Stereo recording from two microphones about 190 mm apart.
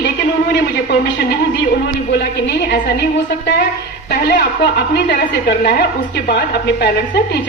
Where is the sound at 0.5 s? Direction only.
60° left (ahead or behind).